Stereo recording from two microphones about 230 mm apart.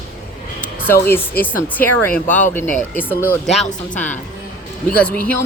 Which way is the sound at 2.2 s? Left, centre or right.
Left.